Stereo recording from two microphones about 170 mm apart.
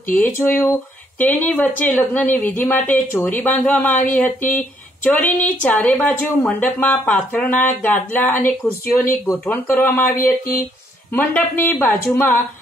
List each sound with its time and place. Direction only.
0.1 s speech: 10° left (ahead or behind)
10.2 s speech: 55° left (ahead or behind)
11.1 s speech: 10° left (ahead or behind)